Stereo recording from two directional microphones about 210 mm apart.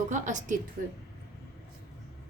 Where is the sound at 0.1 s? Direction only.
35° right (ahead or behind).